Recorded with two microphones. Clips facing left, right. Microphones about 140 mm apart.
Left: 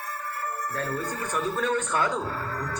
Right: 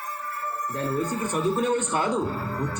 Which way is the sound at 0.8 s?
25° right (ahead or behind).